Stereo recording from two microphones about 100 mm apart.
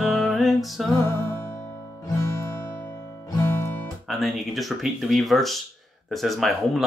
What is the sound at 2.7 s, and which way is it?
Music, 25° left (ahead or behind).